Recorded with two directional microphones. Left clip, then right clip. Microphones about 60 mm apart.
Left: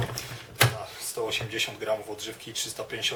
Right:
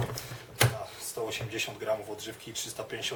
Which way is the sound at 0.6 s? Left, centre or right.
Centre.